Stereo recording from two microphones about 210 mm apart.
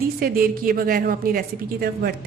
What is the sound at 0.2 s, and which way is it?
A woman's voice, 45° right (ahead or behind).